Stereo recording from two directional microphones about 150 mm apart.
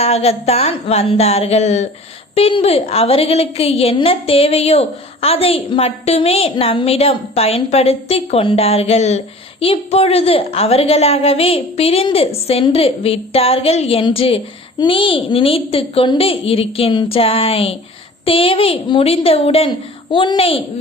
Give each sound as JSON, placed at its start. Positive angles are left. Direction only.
{"t": 0.0, "sound": "a woman's voice", "side_deg": 45}